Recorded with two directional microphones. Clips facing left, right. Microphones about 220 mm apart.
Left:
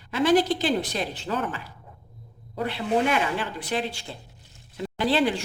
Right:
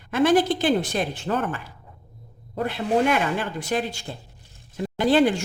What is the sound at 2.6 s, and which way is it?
A woman's voice, 50° right (ahead or behind).